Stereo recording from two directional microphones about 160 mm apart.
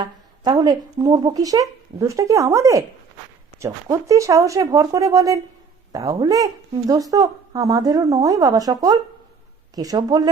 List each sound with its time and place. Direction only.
0.0 s speech: 25° right (ahead or behind)